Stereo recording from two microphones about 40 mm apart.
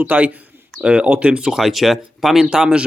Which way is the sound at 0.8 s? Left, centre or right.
Right.